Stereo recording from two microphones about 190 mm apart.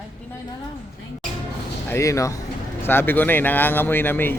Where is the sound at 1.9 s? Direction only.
15° left (ahead or behind).